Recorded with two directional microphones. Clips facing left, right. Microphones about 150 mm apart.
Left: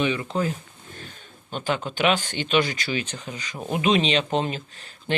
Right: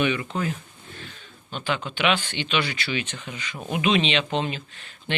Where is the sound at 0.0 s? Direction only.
35° left (ahead or behind).